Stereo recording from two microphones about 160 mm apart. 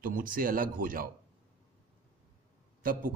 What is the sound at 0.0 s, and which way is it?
Speech, 60° right (ahead or behind).